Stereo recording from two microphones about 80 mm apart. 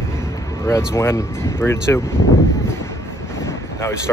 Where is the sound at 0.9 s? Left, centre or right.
Left.